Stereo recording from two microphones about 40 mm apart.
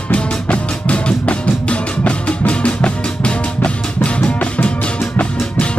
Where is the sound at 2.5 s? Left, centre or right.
Left.